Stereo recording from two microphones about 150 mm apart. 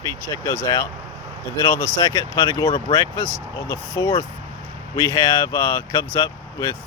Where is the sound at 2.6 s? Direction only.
35° left (ahead or behind).